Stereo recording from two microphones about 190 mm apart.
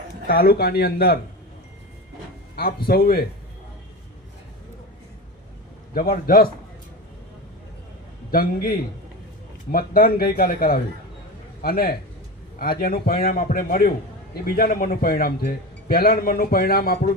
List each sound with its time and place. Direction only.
0.3 s a man's voice: 50° left (ahead or behind)
2.6 s a man's voice: 55° left (ahead or behind)
5.9 s a man's voice: 50° left (ahead or behind)
8.3 s a man's voice: 50° left (ahead or behind)